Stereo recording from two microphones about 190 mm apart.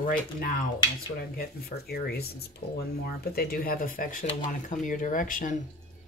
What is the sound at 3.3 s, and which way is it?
Speech, 55° left (ahead or behind).